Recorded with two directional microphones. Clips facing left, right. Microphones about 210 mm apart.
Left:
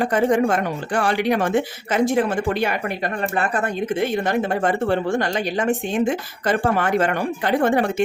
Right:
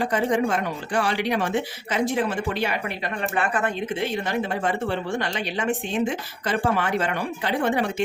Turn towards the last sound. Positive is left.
turn(degrees=50)  # may be behind; listen again after turning